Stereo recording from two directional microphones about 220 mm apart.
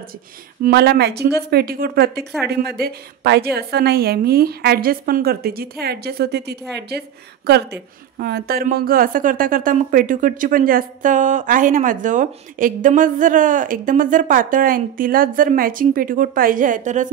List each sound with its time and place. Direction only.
0.6 s a woman's voice: 45° right (ahead or behind)